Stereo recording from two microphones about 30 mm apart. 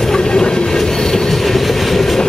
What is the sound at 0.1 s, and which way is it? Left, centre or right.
Vehicle, left.